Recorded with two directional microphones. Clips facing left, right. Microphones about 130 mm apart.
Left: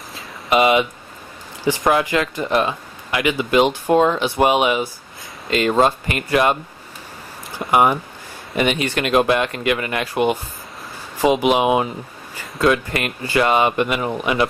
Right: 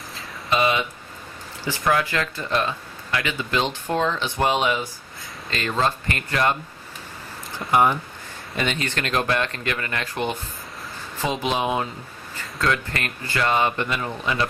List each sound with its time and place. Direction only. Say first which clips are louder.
0.5 s speech: left 6 dB; 20° left (ahead or behind)
1.9 s speech: left 3 dB; 20° left (ahead or behind)
7.6 s speech: left 3 dB; 15° left (ahead or behind)